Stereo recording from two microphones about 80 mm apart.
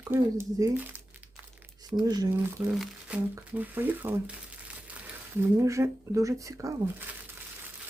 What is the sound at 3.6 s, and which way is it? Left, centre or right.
Speech, right.